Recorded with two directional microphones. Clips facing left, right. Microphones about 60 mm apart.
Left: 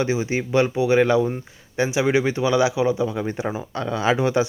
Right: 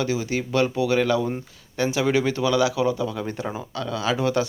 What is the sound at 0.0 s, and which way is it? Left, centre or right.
Speech, left.